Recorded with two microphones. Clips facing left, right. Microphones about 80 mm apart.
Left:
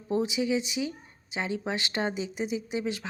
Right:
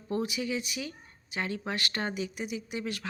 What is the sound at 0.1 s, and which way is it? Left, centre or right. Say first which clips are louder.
Speech: left 5 dB; centre.